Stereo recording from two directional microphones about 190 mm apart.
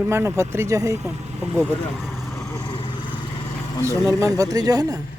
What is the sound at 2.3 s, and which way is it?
Vehicle, 15° left (ahead or behind).